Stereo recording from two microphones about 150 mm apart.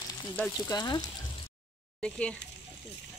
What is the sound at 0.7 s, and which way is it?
Speech, 25° left (ahead or behind).